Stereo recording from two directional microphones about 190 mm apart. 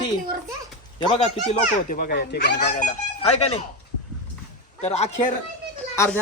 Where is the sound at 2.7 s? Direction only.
35° left (ahead or behind).